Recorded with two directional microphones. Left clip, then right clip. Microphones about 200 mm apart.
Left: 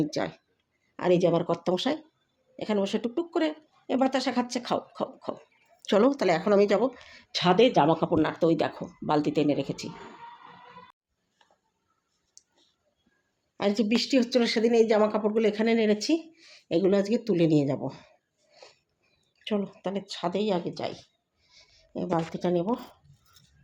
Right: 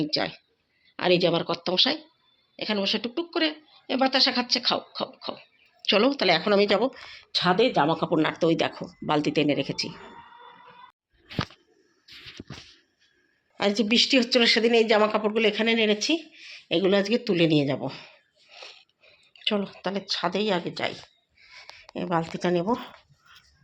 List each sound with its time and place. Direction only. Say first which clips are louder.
0.0 s speech: right 2 dB; 15° left (ahead or behind)
2.6 s speech: right 2 dB; 20° left (ahead or behind)
7.3 s speech: even; 20° left (ahead or behind)
8.1 s speech: right 1 dB; 5° left (ahead or behind)
13.6 s speech: right 4 dB; 5° left (ahead or behind)
19.4 s speech: right 4 dB; 10° left (ahead or behind)